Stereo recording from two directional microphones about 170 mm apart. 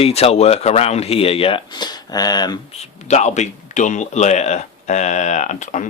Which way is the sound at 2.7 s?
40° left (ahead or behind).